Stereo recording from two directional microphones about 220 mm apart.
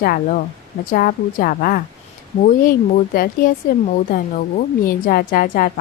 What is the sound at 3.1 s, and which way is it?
A woman's voice, 40° left (ahead or behind).